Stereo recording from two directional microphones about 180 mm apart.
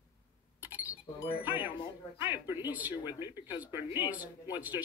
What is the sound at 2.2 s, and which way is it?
Speech, 10° right (ahead or behind).